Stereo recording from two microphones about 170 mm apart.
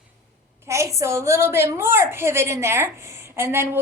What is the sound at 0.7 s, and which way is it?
A woman's voice, 15° right (ahead or behind).